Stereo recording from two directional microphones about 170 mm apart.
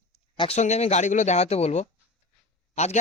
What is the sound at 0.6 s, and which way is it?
A man's voice, 40° left (ahead or behind).